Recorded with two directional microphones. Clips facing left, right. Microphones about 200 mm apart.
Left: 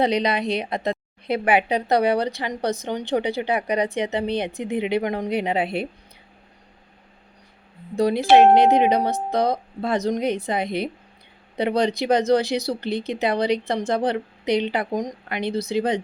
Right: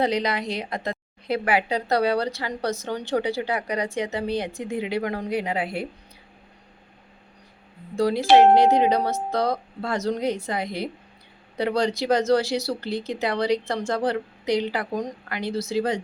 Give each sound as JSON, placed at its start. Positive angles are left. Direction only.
{"t": 0.0, "sound": "speech", "side_deg": 20}
{"t": 7.9, "sound": "speech", "side_deg": 20}